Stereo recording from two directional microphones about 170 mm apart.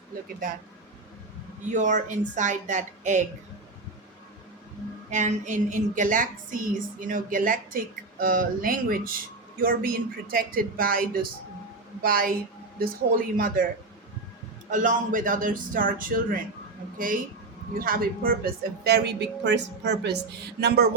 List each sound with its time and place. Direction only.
1.6 s speech: 45° right (ahead or behind)
5.1 s a woman's voice: 45° right (ahead or behind)
14.7 s a woman's voice: 50° right (ahead or behind)
18.9 s a woman's voice: 80° right
20.6 s speech: 70° right (ahead or behind)